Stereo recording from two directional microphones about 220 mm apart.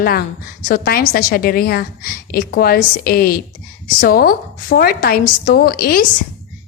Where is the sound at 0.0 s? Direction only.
45° left (ahead or behind).